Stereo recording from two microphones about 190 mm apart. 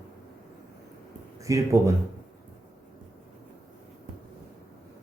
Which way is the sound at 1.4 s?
15° right (ahead or behind).